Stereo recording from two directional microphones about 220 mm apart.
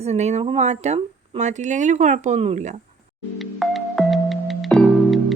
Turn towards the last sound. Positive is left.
turn(degrees=0)  # may be behind; listen again after turning